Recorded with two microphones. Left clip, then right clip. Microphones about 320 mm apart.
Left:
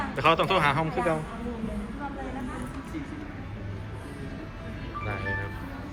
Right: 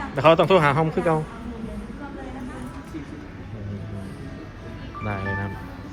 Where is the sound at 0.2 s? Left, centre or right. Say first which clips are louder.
Right 7 dB; centre.